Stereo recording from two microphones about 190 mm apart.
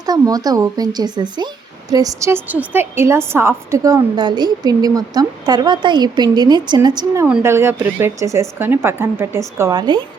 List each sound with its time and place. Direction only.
0.0 s a woman's voice: 20° right (ahead or behind)